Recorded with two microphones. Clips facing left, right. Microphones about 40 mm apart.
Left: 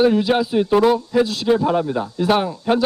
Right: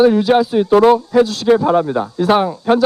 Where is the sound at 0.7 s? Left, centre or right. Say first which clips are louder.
Right 6 dB; right.